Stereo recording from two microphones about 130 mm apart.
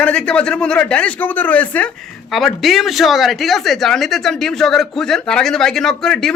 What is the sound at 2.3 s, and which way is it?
Speech, centre (ahead or behind).